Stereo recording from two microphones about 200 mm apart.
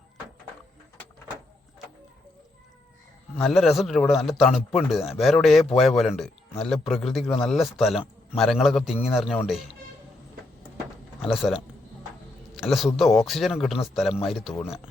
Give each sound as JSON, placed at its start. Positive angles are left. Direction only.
{"t": 3.3, "sound": "a man's voice", "side_deg": 0}
{"t": 11.2, "sound": "a man's voice", "side_deg": 0}